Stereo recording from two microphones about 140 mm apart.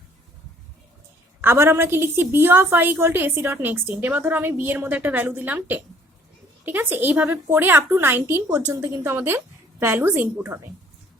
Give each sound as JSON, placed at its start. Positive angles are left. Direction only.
{"t": 1.4, "sound": "a woman's voice", "side_deg": -15}